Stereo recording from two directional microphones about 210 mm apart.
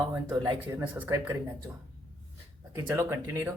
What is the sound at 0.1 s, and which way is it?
Speech, 15° right (ahead or behind).